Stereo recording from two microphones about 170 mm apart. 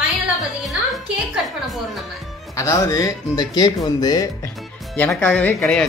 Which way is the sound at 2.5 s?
20° left (ahead or behind).